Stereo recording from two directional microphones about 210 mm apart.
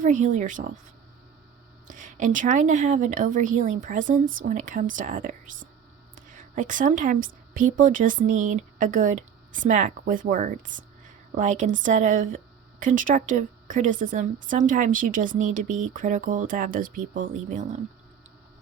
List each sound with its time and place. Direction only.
0.0 s a woman's voice: 35° right (ahead or behind)
1.9 s a woman's voice: 35° right (ahead or behind)